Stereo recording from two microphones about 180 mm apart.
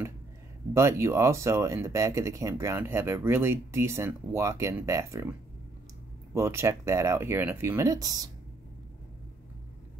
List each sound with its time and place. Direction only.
0.7 s speech: 15° right (ahead or behind)
6.3 s speech: 15° right (ahead or behind)